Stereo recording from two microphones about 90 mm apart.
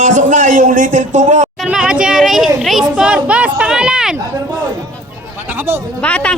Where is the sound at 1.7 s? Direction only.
10° right (ahead or behind).